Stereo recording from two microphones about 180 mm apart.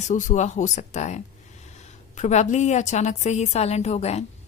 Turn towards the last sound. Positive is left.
turn(degrees=35)  # may be behind; listen again after turning